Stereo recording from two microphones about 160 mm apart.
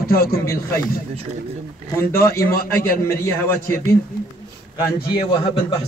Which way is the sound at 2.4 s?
70° left (ahead or behind).